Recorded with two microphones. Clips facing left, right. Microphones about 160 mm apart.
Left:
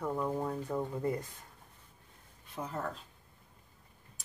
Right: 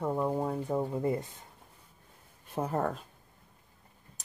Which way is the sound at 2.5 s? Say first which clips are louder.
Right 7 dB; 50° right (ahead or behind).